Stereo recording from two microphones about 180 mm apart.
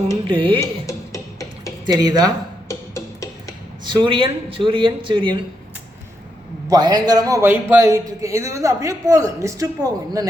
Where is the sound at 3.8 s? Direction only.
25° right (ahead or behind).